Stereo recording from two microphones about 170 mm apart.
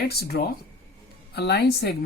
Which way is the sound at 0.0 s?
65° left (ahead or behind).